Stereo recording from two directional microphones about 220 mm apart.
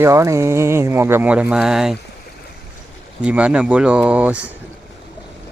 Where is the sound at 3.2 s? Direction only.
5° right (ahead or behind).